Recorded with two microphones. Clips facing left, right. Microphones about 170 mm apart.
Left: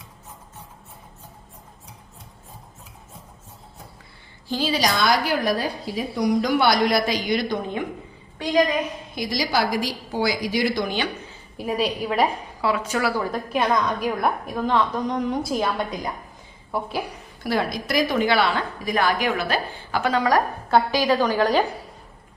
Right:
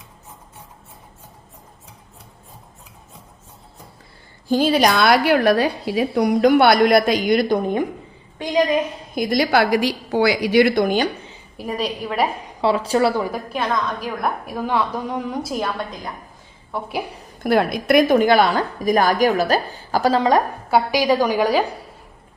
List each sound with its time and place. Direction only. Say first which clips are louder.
4.4 s a woman's voice: right 7 dB; 50° right (ahead or behind)
9.1 s a woman's voice: right 7 dB; 55° right (ahead or behind)
11.5 s a woman's voice: left 1 dB; 5° left (ahead or behind)
12.6 s a woman's voice: right 6 dB; 30° right (ahead or behind)
13.5 s a woman's voice: left 5 dB; 10° left (ahead or behind)
14.2 s a woman's voice: even; 5° right (ahead or behind)
16.7 s a woman's voice: left 1 dB; 5° left (ahead or behind)
17.4 s a woman's voice: right 6 dB; 55° right (ahead or behind); by 20.4 s 25° right (ahead or behind)
20.7 s a woman's voice: right 2 dB; 10° right (ahead or behind)